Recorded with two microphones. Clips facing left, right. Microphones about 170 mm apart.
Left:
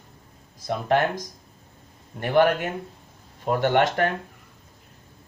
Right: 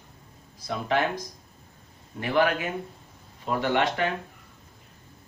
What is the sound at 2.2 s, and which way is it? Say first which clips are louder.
Speech: left 4 dB; 45° left (ahead or behind).